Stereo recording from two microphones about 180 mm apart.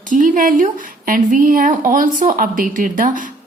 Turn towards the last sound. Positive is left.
turn(degrees=-50)  # may be behind; listen again after turning